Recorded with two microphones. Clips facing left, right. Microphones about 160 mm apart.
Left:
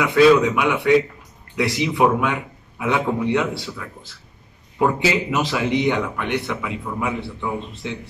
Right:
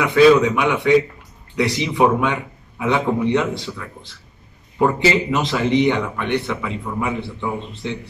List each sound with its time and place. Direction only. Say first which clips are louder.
0.0 s a man's voice: right 1 dB; centre (ahead or behind)